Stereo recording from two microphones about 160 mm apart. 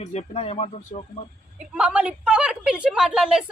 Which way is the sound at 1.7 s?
10° right (ahead or behind).